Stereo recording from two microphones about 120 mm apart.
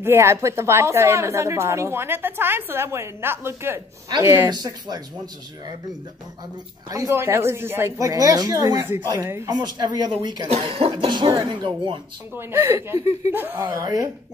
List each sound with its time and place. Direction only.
0.0 s a woman's voice: 20° right (ahead or behind)
4.5 s speech: 35° right (ahead or behind)
6.9 s a woman's voice: 25° right (ahead or behind)
9.5 s speech: 35° right (ahead or behind)
12.4 s a woman's voice: 20° right (ahead or behind)
13.7 s a woman's voice: 30° right (ahead or behind)